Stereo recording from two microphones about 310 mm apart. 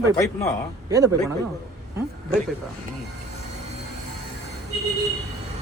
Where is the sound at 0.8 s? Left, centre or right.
Centre.